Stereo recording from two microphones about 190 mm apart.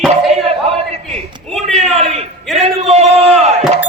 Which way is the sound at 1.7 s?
35° right (ahead or behind).